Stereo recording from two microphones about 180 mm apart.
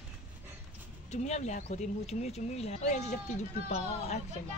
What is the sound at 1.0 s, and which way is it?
Speech, 40° left (ahead or behind).